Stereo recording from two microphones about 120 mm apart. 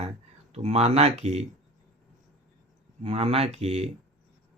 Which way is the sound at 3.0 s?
55° right (ahead or behind).